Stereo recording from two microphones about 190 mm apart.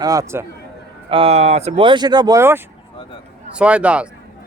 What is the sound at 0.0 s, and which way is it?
Speech, 15° right (ahead or behind).